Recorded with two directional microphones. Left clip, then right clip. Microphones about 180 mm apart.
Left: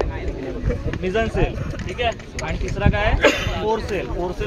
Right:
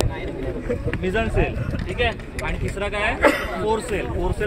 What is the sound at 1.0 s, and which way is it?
Speech, 55° left (ahead or behind).